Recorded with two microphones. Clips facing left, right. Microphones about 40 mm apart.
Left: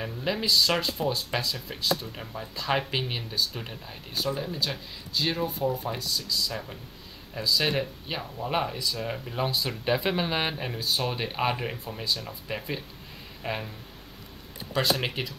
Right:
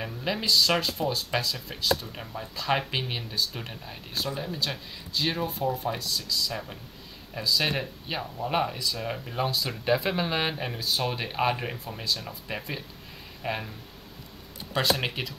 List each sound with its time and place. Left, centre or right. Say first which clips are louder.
0.0 s speech: left 1 dB; centre
14.7 s speech: even; centre